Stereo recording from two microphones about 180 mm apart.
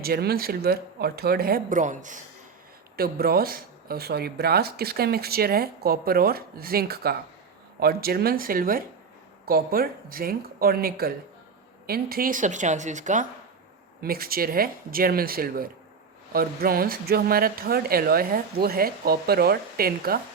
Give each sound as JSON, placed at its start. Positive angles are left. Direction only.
{"t": 0.0, "sound": "speech", "side_deg": -60}
{"t": 2.9, "sound": "a woman's voice", "side_deg": -60}
{"t": 14.0, "sound": "speech", "side_deg": -55}